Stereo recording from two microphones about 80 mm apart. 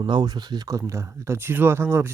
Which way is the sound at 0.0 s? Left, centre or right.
Right.